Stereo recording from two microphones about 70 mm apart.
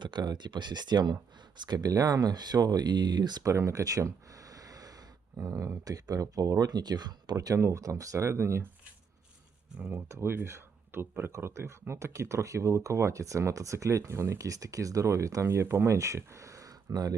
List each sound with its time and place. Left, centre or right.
0.0 s speech: right
1.6 s speech: right
3.4 s a sound: right
5.4 s speech: right
7.3 s speech: right
9.9 s speech: right
16.9 s speech: right